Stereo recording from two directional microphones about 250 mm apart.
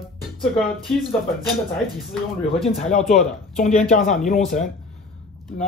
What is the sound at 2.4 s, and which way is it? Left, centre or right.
Speech, left.